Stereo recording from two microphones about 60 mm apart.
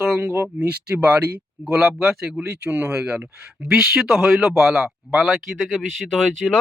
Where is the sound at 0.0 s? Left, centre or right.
Centre.